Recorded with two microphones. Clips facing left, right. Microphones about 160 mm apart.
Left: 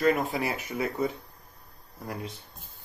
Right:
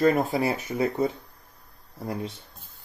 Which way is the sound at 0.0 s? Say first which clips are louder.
Right 4 dB; 30° right (ahead or behind).